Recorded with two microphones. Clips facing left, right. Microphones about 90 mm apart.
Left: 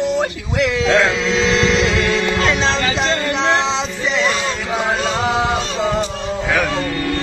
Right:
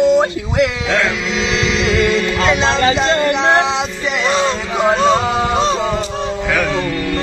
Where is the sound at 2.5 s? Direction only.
35° right (ahead or behind).